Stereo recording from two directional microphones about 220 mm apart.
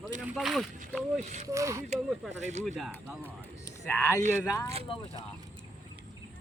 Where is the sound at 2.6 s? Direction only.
Centre (ahead or behind).